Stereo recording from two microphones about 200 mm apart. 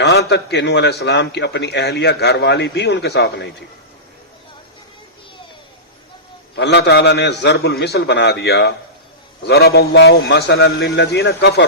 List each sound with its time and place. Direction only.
0.0 s a man's voice: 60° left (ahead or behind)
6.6 s a man's voice: 60° left (ahead or behind)